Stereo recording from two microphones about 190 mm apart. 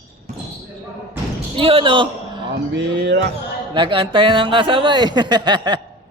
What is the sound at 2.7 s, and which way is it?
Speech, 65° right (ahead or behind).